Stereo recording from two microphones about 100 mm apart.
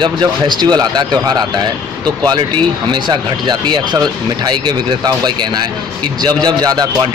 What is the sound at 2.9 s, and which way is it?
Speech, 50° right (ahead or behind).